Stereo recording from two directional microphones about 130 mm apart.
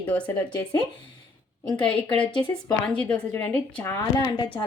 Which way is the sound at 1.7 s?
40° left (ahead or behind).